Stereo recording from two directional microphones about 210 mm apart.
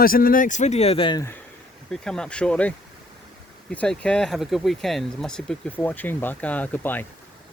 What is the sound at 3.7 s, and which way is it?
Speech, 5° left (ahead or behind).